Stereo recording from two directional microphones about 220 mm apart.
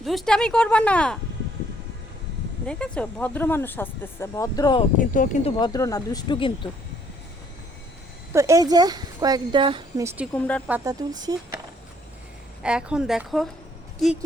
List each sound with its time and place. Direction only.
0.0 s speech: centre (ahead or behind)
2.6 s speech: 5° left (ahead or behind); by 4.9 s 20° left (ahead or behind)
4.9 s speech: 35° left (ahead or behind); by 6.7 s 20° left (ahead or behind)
8.3 s speech: 15° right (ahead or behind)
10.3 s speech: 5° left (ahead or behind)
10.7 s speech: 10° right (ahead or behind)
12.6 s speech: 5° right (ahead or behind)